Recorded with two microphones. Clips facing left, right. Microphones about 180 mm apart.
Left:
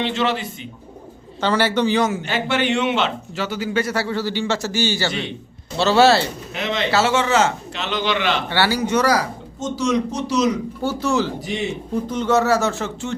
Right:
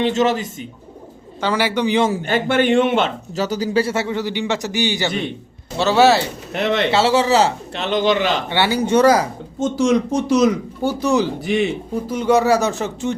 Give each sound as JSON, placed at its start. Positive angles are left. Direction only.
{"t": 0.0, "sound": "speech", "side_deg": -45}
{"t": 1.4, "sound": "speech", "side_deg": -10}
{"t": 2.2, "sound": "a man's voice", "side_deg": -50}
{"t": 6.5, "sound": "speech", "side_deg": -60}
{"t": 6.9, "sound": "speech", "side_deg": -30}
{"t": 7.8, "sound": "speech", "side_deg": -50}
{"t": 8.4, "sound": "a man's voice", "side_deg": -20}
{"t": 9.6, "sound": "speech", "side_deg": -55}
{"t": 10.8, "sound": "speech", "side_deg": -15}